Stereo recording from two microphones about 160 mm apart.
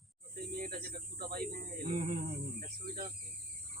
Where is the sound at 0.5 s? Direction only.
65° right (ahead or behind).